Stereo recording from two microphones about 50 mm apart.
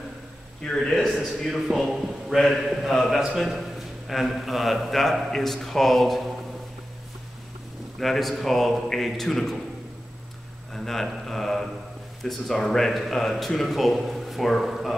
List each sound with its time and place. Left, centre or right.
0.7 s a man's voice: centre
8.0 s speech: centre
10.7 s speech: centre